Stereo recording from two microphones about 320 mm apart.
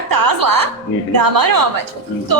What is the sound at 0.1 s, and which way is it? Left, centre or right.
A woman's voice, right.